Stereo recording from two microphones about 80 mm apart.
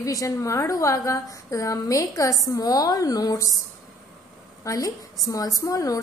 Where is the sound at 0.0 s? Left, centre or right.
Left.